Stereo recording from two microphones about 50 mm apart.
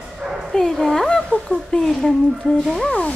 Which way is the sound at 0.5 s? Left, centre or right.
Centre.